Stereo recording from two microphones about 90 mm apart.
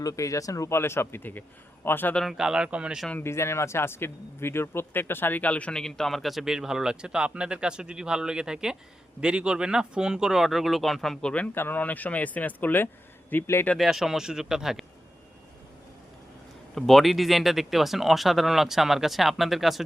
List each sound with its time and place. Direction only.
0.0 s a man's voice: 35° left (ahead or behind)
2.4 s speech: 10° right (ahead or behind)
3.2 s speech: 30° left (ahead or behind); by 11.4 s 10° left (ahead or behind)
11.5 s a man's voice: 25° left (ahead or behind)
13.7 s speech: centre (ahead or behind)
16.7 s speech: 5° left (ahead or behind)